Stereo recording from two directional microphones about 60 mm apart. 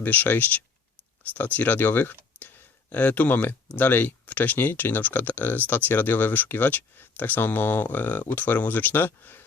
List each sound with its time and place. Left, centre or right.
0.0 s speech: left